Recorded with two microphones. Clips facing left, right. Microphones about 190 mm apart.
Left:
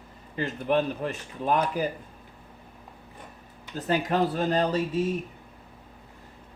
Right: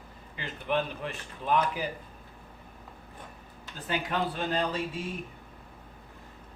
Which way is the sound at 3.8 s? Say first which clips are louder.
Left 6 dB; 40° left (ahead or behind).